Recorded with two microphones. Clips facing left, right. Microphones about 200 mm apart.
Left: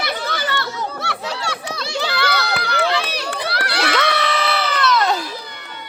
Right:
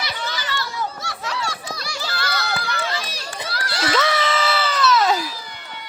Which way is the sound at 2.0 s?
65° left (ahead or behind).